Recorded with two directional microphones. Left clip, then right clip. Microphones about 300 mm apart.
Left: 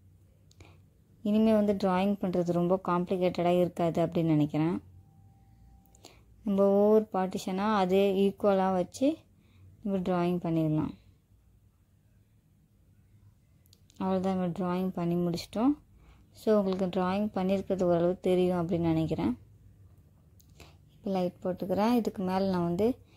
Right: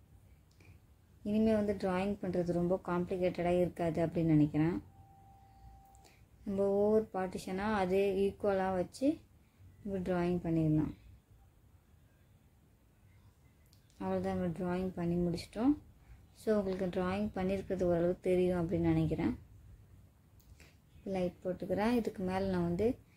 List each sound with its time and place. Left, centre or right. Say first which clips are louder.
1.2 s a woman's voice: left 6 dB; left
6.4 s a woman's voice: left 7 dB; left
13.9 s a woman's voice: left 5 dB; left
20.5 s speech: left 7 dB; left